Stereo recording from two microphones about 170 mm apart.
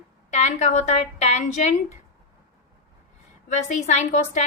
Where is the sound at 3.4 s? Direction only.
45° left (ahead or behind).